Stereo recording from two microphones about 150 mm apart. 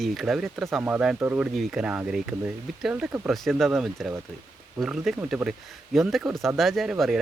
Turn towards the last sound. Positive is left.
turn(degrees=0)  # may be behind; listen again after turning